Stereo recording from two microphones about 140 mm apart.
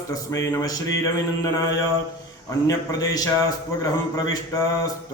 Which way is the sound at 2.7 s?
25° left (ahead or behind).